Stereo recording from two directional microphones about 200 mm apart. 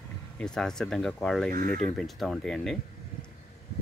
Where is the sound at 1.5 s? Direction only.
45° right (ahead or behind).